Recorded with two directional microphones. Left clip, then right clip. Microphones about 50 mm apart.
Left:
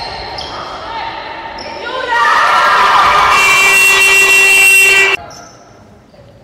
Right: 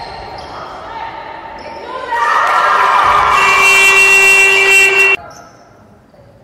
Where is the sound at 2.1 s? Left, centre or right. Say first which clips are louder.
Left 2 dB; centre.